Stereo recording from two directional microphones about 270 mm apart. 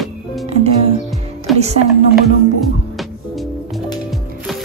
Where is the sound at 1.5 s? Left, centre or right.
Right.